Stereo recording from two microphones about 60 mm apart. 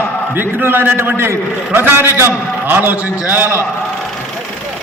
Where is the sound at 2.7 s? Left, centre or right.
Right.